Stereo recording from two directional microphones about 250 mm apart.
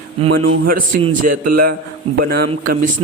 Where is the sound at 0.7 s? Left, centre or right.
Right.